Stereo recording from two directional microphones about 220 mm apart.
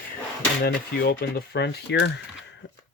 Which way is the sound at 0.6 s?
45° left (ahead or behind).